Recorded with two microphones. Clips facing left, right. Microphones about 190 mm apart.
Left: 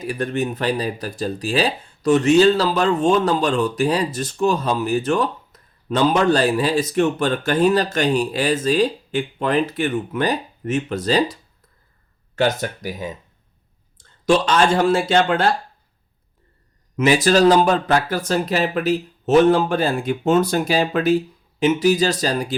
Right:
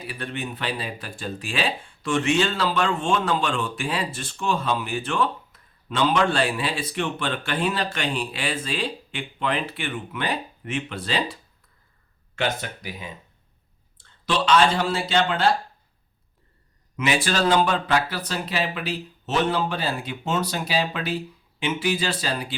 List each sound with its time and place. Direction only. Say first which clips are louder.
0.0 s speech: left 9 dB; 45° left (ahead or behind)
12.4 s speech: left 7 dB; 40° left (ahead or behind)
17.0 s speech: left 8 dB; 40° left (ahead or behind)